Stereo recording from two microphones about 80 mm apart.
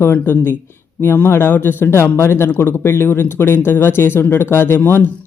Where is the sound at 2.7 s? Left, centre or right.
Left.